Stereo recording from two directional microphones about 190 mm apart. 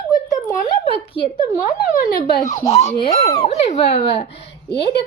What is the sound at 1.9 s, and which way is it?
Speech, 45° left (ahead or behind).